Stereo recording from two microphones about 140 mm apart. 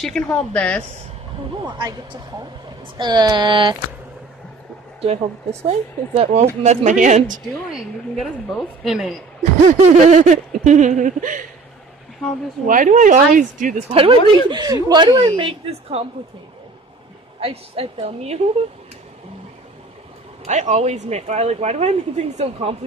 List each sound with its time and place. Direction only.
0.0 s speech: 5° left (ahead or behind)
1.6 s a woman's voice: 30° right (ahead or behind)
5.0 s speech: 50° right (ahead or behind)
6.6 s a sound: 60° right (ahead or behind)
7.7 s a woman's voice: centre (ahead or behind)
9.4 s a sound: 55° right (ahead or behind); by 11.4 s 70° right (ahead or behind)
12.6 s a woman's voice: 70° right (ahead or behind)
13.9 s a woman's voice: 35° right (ahead or behind)
17.4 s speech: 45° right (ahead or behind)
20.4 s speech: 55° right (ahead or behind)